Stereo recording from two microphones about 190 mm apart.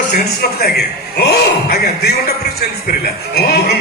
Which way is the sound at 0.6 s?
60° left (ahead or behind).